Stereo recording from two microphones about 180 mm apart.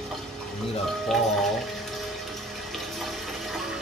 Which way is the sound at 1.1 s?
Centre (ahead or behind).